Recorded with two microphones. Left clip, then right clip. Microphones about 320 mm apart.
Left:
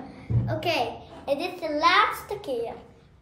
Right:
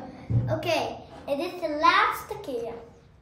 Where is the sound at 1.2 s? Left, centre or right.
Centre.